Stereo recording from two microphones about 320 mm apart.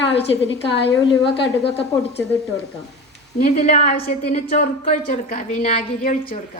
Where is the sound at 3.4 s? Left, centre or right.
Left.